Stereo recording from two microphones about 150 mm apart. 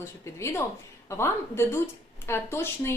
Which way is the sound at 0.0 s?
20° left (ahead or behind).